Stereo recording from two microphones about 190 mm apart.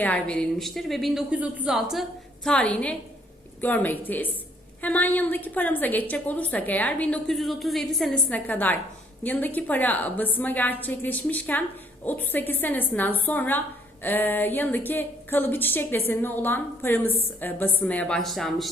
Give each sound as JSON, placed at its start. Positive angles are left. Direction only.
{"t": 0.0, "sound": "a woman's voice", "side_deg": 5}